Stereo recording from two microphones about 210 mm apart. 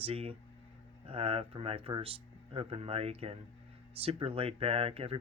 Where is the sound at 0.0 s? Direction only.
30° right (ahead or behind).